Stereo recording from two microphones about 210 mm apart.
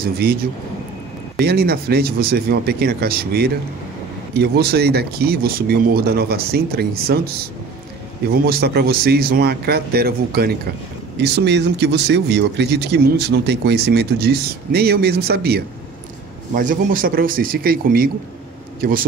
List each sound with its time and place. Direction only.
0.0 s speech: 50° right (ahead or behind)